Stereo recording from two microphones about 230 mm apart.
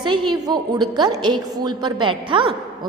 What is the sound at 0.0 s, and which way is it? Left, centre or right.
A woman's voice, centre.